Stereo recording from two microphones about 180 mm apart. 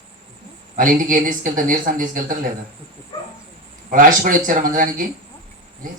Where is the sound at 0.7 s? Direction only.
50° right (ahead or behind).